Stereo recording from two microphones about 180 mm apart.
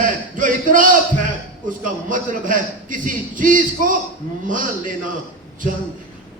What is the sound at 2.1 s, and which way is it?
A man's voice, 45° right (ahead or behind).